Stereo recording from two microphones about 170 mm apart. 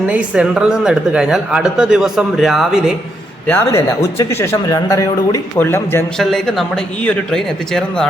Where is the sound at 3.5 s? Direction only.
15° left (ahead or behind).